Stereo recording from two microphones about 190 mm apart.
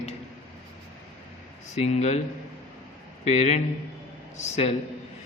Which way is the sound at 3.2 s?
35° left (ahead or behind).